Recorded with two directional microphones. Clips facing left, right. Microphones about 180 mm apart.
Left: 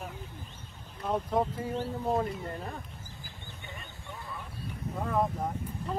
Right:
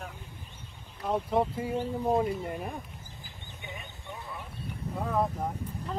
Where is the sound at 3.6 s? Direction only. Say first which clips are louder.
Right 5 dB; 20° right (ahead or behind).